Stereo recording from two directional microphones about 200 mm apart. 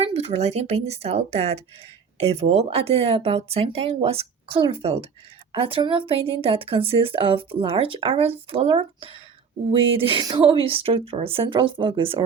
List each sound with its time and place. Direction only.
0.0 s a woman's voice: 30° right (ahead or behind)